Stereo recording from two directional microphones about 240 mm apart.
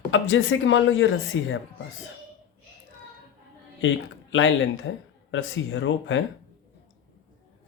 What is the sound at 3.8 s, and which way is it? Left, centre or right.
Speech, left.